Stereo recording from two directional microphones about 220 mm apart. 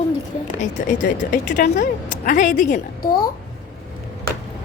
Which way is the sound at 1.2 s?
35° left (ahead or behind).